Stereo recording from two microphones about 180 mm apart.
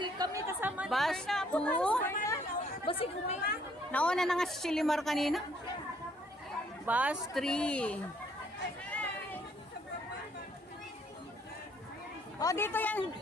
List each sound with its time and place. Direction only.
0.0 s chatter: 20° right (ahead or behind); by 2.4 s 15° left (ahead or behind)
2.8 s speech: 30° left (ahead or behind)
3.9 s a woman's voice: 5° left (ahead or behind)
6.8 s a woman's voice: 10° right (ahead or behind)
8.8 s a sound: 5° left (ahead or behind)
12.4 s speech: 15° left (ahead or behind)